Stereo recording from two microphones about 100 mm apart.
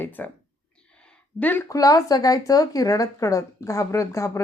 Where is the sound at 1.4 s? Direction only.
15° left (ahead or behind).